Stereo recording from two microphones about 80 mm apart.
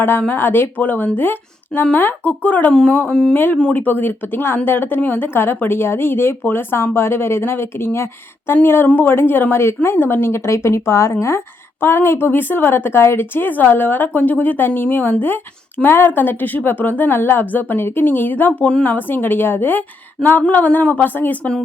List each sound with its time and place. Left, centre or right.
0.0 s a woman's voice: left
3.3 s a woman's voice: left